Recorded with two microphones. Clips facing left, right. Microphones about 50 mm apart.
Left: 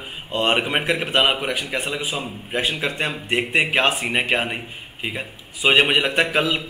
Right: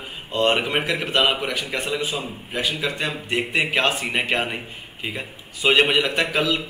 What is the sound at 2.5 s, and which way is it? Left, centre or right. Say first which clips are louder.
A man's voice: left 2 dB; left.